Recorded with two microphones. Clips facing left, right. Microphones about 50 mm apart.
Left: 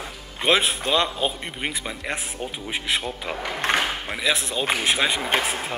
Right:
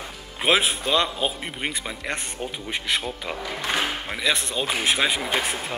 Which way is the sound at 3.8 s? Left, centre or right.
Centre.